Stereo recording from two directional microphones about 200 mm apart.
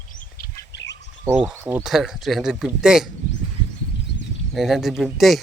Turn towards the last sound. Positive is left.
turn(degrees=0)  # may be behind; listen again after turning